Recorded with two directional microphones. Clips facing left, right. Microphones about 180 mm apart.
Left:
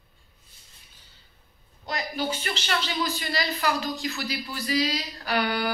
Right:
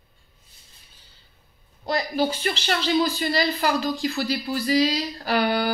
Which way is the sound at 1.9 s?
35° right (ahead or behind).